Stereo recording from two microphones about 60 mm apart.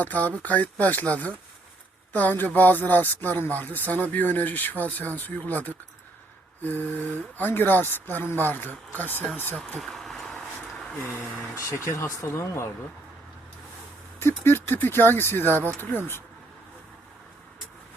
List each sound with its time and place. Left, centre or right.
0.0 s speech: left
9.7 s a sound: centre
11.5 s speech: left
14.2 s speech: left